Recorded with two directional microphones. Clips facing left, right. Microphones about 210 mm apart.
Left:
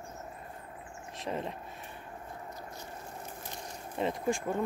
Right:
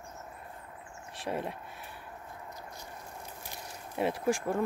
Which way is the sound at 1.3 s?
10° right (ahead or behind).